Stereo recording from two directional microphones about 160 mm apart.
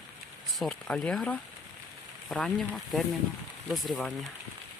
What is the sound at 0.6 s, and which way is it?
Speech, 5° left (ahead or behind).